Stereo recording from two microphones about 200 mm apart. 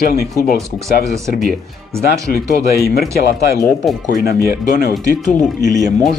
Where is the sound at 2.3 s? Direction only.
50° left (ahead or behind).